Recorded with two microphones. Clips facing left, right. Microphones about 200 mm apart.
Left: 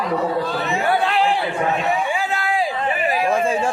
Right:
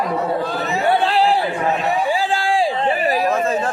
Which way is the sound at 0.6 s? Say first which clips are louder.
Right 1 dB; 35° right (ahead or behind).